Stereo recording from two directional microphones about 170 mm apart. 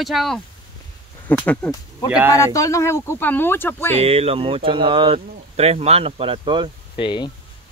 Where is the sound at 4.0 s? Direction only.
35° right (ahead or behind).